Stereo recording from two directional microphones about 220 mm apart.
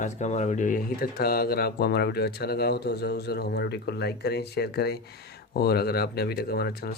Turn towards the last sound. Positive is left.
turn(degrees=45)  # may be behind; listen again after turning